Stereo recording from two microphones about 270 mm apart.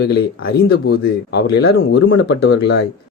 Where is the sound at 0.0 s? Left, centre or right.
Left.